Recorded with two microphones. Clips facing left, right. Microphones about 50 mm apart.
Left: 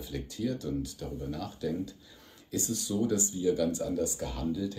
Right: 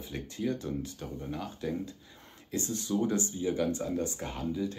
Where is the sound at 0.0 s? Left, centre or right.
Right.